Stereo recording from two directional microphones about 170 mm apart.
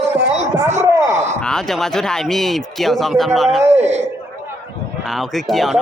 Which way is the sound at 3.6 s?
40° right (ahead or behind).